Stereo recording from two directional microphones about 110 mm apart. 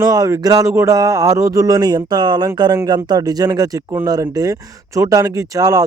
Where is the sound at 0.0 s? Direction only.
30° right (ahead or behind).